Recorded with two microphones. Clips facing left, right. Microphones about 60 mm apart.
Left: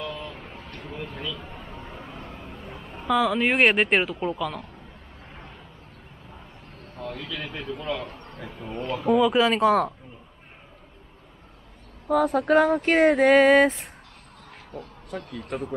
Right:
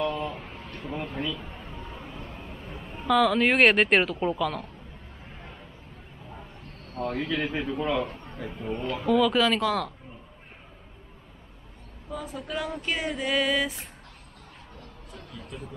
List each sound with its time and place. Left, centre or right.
0.0 s a sound: right
1.1 s a man's voice: centre
1.7 s a sound: centre
2.2 s speech: centre
7.0 s speech: right
7.5 s a man's voice: centre
9.0 s speech: left
12.1 s speech: left